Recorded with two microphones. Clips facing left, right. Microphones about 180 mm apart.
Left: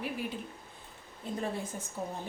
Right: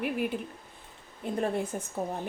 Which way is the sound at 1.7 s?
55° right (ahead or behind).